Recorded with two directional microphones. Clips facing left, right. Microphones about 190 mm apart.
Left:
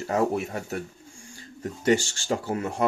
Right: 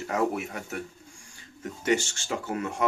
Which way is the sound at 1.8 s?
35° left (ahead or behind).